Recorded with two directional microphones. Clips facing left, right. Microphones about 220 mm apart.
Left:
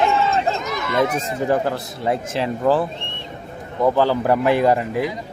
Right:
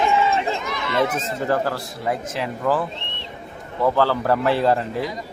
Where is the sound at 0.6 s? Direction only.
45° left (ahead or behind).